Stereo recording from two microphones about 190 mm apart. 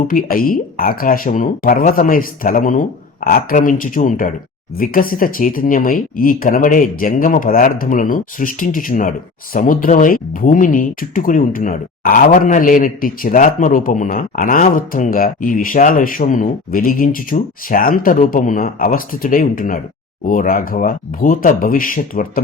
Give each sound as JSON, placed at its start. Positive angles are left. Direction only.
{"t": 0.1, "sound": "speech", "side_deg": 50}